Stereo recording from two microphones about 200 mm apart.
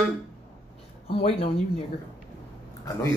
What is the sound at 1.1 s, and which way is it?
Speech, 30° left (ahead or behind).